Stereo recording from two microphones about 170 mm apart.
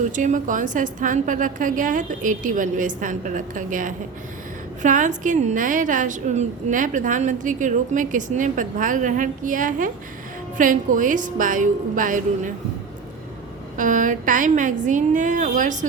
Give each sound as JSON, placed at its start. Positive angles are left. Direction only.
{"t": 0.0, "sound": "a woman's voice", "side_deg": -45}
{"t": 13.7, "sound": "a woman's voice", "side_deg": -50}